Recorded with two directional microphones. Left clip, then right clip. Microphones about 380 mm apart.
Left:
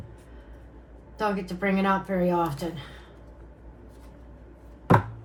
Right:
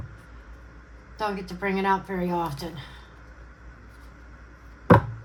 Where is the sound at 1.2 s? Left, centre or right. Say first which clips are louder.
Left 1 dB; right.